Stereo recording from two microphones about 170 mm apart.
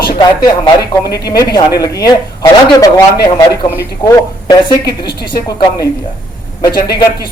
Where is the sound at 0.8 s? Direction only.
70° left (ahead or behind).